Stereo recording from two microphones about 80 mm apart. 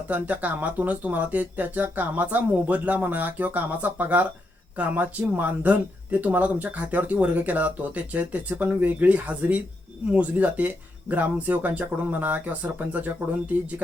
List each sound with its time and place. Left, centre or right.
0.1 s speech: centre